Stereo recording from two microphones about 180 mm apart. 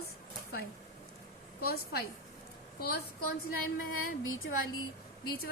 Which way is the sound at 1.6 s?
60° left (ahead or behind).